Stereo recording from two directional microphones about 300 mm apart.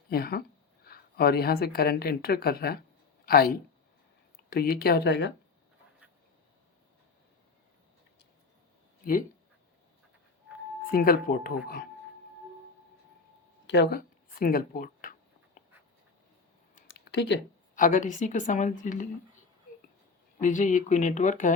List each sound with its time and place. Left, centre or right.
0.1 s a woman's voice: left
10.9 s a woman's voice: left
13.7 s speech: left
15.6 s writing: left
16.7 s a sound: left
17.7 s a woman's voice: left
20.4 s a woman's voice: left